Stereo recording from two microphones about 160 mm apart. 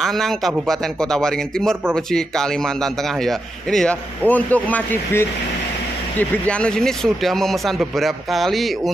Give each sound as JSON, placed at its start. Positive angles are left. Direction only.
{"t": 0.0, "sound": "a man's voice", "side_deg": 0}